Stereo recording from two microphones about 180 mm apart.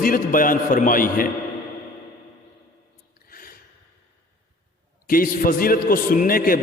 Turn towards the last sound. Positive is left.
turn(degrees=55)  # may be behind; listen again after turning